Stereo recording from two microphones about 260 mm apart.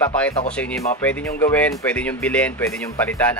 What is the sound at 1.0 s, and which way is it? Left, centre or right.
Speech, centre.